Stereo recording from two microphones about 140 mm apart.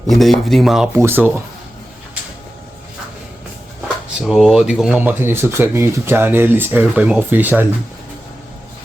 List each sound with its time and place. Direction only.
0.1 s speech: centre (ahead or behind)
0.9 s speech: 15° right (ahead or behind)
4.2 s speech: centre (ahead or behind)